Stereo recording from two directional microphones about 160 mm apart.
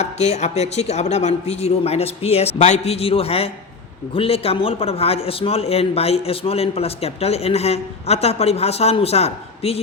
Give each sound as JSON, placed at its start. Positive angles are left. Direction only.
{"t": 0.0, "sound": "a man's voice", "side_deg": 45}